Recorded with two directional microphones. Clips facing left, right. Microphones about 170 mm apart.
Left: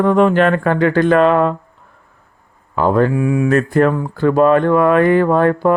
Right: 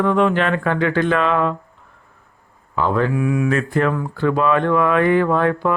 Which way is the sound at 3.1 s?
30° left (ahead or behind).